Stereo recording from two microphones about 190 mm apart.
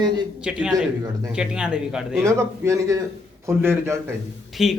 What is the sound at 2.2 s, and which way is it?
Speech, 15° right (ahead or behind).